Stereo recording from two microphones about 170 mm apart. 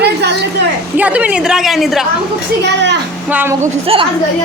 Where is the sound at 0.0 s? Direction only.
85° right.